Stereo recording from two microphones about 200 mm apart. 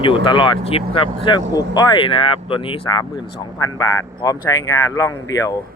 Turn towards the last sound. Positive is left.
turn(degrees=15)  # may be behind; listen again after turning